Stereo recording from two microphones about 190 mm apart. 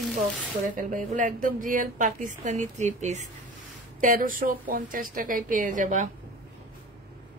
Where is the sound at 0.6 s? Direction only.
45° right (ahead or behind).